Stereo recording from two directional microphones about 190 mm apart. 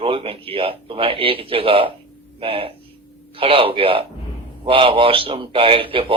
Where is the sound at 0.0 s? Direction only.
30° right (ahead or behind).